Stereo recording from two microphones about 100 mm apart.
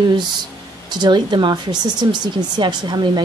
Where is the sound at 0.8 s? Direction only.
50° right (ahead or behind).